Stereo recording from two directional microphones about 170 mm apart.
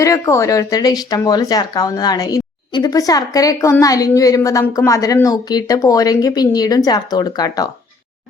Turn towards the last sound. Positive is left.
turn(degrees=25)  # may be behind; listen again after turning